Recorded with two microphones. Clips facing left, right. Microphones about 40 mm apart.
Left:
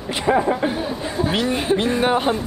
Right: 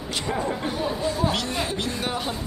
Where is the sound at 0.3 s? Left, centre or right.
Left.